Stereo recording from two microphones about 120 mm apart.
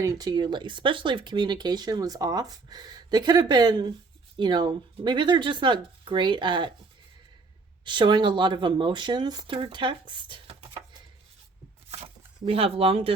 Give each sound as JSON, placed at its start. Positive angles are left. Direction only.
{"t": 0.0, "sound": "speech", "side_deg": -35}
{"t": 7.9, "sound": "speech", "side_deg": -40}
{"t": 11.9, "sound": "a sound", "side_deg": -55}